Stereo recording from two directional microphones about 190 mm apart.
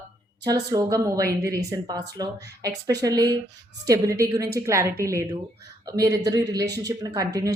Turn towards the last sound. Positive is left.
turn(degrees=-20)  # may be behind; listen again after turning